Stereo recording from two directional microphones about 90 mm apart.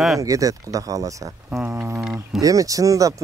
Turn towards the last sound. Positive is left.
turn(degrees=-40)  # may be behind; listen again after turning